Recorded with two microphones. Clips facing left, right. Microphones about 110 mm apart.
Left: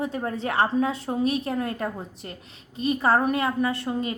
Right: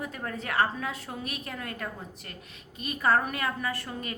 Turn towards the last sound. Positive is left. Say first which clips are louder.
# left 8 dB
turn(degrees=25)  # may be behind; listen again after turning